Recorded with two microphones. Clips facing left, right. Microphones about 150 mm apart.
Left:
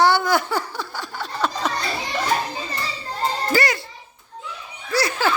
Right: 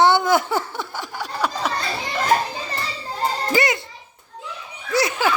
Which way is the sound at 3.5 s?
20° right (ahead or behind).